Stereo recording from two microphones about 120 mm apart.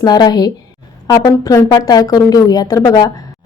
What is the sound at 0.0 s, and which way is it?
Speech, 35° left (ahead or behind).